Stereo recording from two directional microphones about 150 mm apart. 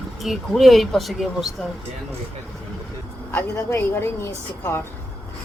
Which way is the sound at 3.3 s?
15° left (ahead or behind).